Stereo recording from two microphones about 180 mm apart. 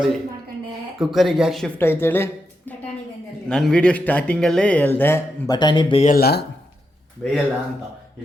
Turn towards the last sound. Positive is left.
turn(degrees=-5)  # may be behind; listen again after turning